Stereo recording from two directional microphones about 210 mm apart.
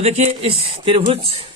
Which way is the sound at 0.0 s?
30° right (ahead or behind).